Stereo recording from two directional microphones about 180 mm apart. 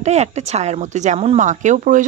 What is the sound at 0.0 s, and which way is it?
Speech, 40° right (ahead or behind).